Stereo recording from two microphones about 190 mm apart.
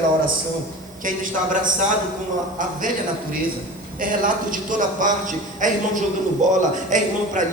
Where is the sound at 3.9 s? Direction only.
45° right (ahead or behind).